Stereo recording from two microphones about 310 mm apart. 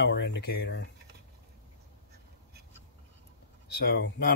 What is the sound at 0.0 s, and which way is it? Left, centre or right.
Speech, left.